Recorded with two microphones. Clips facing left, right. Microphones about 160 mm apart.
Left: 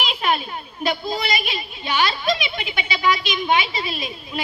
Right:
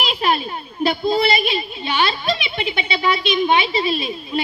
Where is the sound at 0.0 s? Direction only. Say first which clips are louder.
Right 3 dB; 35° right (ahead or behind).